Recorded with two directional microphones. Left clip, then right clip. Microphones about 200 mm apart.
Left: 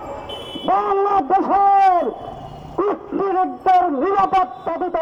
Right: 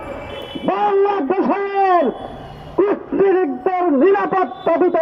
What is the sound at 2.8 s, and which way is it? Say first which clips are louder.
Hoot: right 4 dB; 25° right (ahead or behind).